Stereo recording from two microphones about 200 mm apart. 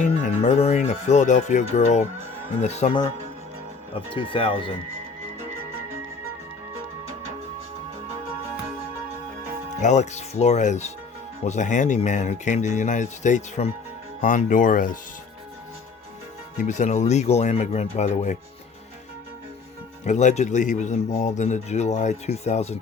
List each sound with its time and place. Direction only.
0.0 s a man's voice: 35° left (ahead or behind)
9.8 s a man's voice: 35° left (ahead or behind)
16.6 s a man's voice: 35° left (ahead or behind)
20.1 s a man's voice: 35° left (ahead or behind)